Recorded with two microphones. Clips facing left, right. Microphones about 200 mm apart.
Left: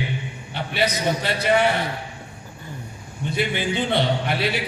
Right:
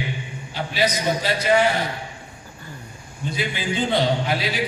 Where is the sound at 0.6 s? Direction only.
60° left (ahead or behind).